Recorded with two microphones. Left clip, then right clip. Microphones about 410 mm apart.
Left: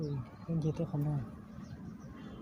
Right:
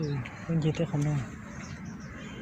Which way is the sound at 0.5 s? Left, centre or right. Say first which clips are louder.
Right 7 dB; left.